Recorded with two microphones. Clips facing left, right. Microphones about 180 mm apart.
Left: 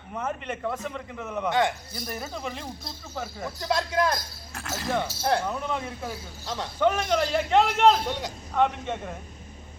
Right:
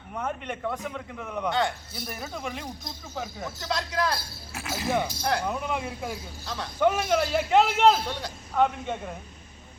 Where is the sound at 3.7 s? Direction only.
25° left (ahead or behind).